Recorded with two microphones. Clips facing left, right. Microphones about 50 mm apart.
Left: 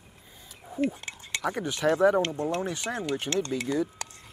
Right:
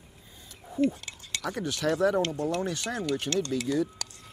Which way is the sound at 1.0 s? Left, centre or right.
Left.